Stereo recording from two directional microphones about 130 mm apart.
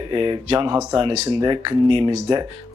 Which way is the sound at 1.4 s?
40° right (ahead or behind).